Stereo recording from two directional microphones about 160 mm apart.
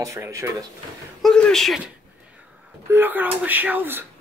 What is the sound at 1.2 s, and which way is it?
Speech, 5° left (ahead or behind).